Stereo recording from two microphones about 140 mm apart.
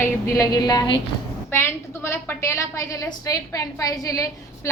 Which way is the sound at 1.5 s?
20° left (ahead or behind).